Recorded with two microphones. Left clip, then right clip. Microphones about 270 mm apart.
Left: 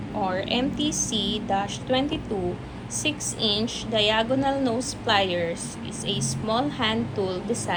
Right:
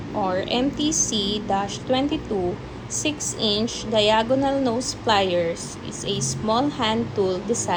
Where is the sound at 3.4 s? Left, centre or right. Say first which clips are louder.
Right 2 dB; centre.